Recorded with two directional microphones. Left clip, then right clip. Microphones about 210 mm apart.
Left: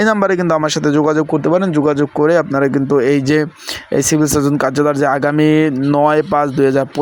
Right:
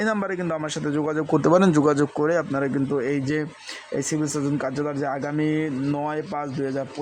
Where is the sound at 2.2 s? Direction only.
20° left (ahead or behind).